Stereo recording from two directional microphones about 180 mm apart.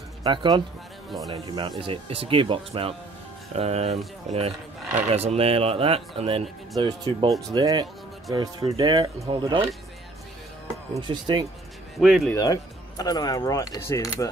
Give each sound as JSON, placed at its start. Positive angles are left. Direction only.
{"t": 0.2, "sound": "speech", "side_deg": -25}
{"t": 11.0, "sound": "speech", "side_deg": -25}
{"t": 12.0, "sound": "speech", "side_deg": -5}
{"t": 12.4, "sound": "speech", "side_deg": 20}